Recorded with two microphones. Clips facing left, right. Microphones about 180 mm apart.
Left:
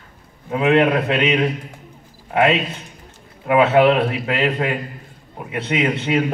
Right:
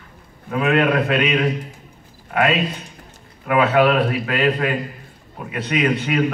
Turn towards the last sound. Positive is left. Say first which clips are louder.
# even
turn(degrees=25)  # may be behind; listen again after turning